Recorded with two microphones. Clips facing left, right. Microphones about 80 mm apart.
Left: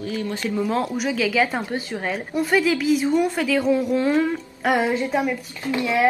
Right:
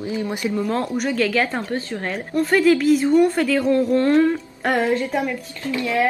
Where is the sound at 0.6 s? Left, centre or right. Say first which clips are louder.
Left 1 dB; centre.